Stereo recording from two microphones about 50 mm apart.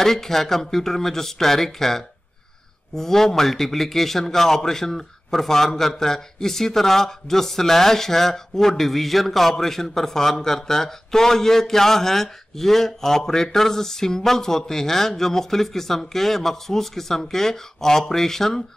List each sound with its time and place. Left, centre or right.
0.0 s a man's voice: centre